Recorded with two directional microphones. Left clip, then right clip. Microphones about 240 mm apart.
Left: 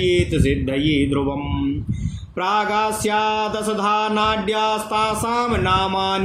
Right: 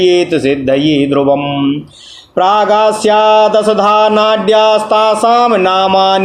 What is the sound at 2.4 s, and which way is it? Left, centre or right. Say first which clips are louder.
Speech: right 11 dB; left.